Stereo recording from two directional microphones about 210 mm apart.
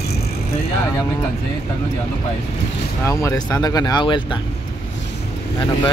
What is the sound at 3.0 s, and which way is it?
Speech, 15° left (ahead or behind).